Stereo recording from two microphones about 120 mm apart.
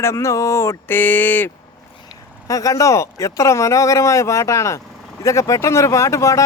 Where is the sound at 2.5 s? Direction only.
30° left (ahead or behind).